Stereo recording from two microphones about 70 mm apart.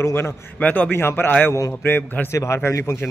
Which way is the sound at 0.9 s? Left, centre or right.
Left.